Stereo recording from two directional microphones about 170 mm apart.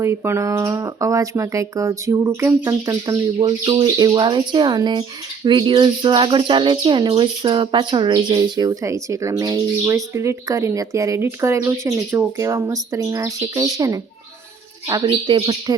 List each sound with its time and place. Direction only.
0.0 s speech: 15° right (ahead or behind)
3.3 s speech: 30° right (ahead or behind)